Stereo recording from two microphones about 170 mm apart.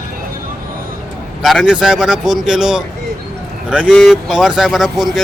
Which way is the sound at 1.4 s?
5° right (ahead or behind).